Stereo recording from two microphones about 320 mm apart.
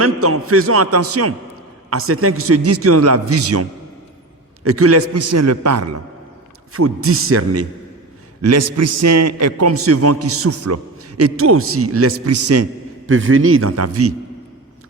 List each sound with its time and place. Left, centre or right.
0.0 s a man's voice: right